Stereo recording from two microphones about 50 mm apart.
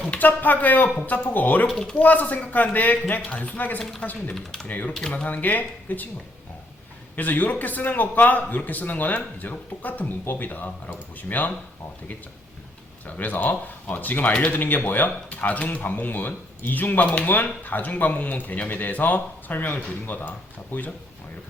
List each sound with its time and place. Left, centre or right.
0.1 s speech: left
1.6 s speech: centre
2.0 s speech: left
7.2 s speech: left
13.1 s speech: left
14.3 s speech: left
14.8 s speech: left
17.0 s speech: left
17.2 s speech: left